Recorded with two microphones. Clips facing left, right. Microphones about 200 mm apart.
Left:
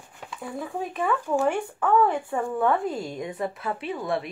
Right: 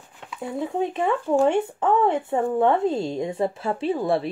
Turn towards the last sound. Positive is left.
turn(degrees=-30)  # may be behind; listen again after turning